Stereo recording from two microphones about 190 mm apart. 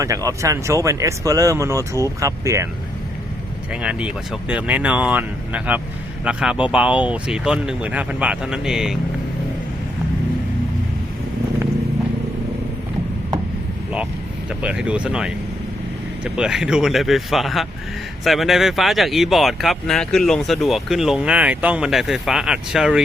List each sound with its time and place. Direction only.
0.0 s speech: 15° right (ahead or behind)
3.8 s speech: 5° right (ahead or behind)
14.6 s speech: 5° right (ahead or behind)